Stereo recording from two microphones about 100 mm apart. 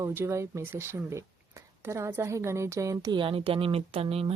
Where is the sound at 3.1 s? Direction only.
60° right (ahead or behind); by 4.3 s 75° right (ahead or behind).